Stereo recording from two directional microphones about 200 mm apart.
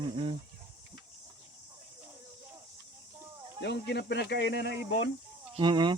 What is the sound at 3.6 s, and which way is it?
Speech, 60° left (ahead or behind).